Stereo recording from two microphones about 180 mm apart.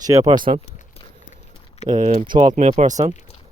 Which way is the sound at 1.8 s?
40° right (ahead or behind).